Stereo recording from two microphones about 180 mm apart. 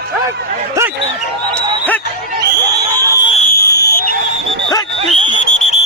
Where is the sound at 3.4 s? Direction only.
50° left (ahead or behind).